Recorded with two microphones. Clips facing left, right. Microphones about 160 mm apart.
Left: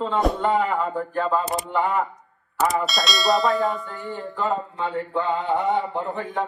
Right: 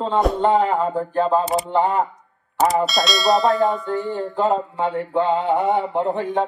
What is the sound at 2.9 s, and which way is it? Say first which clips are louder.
Bell: right 4 dB; centre (ahead or behind).